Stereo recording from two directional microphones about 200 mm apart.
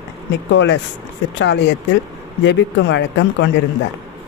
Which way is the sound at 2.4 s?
60° left (ahead or behind).